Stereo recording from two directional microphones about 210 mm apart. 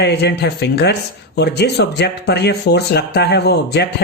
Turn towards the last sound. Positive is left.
turn(degrees=50)  # may be behind; listen again after turning